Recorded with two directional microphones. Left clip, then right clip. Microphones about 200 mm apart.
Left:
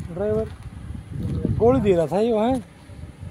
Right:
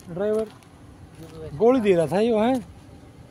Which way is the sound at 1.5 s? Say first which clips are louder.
Even; 15° left (ahead or behind).